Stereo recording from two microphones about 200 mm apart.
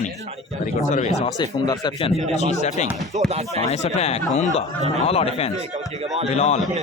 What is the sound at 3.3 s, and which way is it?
Speech, 30° right (ahead or behind).